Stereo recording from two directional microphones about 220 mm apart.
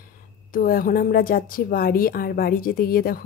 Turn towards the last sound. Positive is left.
turn(degrees=40)  # may be behind; listen again after turning